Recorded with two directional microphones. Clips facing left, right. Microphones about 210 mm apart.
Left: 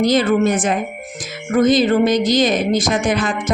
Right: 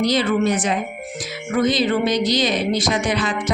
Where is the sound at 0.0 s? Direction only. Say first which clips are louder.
Left 4 dB; 50° left (ahead or behind).